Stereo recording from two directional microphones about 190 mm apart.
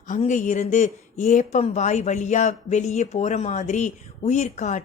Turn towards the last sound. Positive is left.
turn(degrees=40)  # may be behind; listen again after turning